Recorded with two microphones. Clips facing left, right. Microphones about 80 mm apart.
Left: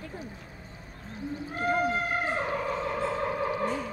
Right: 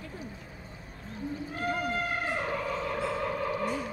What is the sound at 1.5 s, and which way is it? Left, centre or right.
Whale vocalization, left.